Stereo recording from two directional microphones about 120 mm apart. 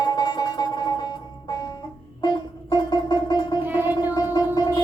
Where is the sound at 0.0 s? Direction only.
35° left (ahead or behind).